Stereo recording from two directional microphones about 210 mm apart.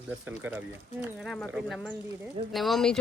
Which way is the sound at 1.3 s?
Centre (ahead or behind).